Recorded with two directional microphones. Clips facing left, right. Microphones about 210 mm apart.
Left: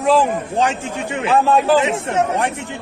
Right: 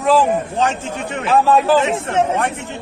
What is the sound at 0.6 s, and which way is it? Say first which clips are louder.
Speech: even; 10° left (ahead or behind).